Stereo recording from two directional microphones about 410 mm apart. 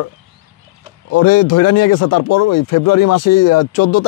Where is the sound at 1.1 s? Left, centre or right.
Left.